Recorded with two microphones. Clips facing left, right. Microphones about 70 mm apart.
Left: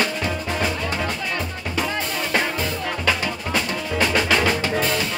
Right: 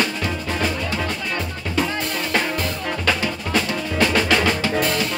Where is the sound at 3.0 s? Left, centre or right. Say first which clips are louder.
Right 1 dB; centre.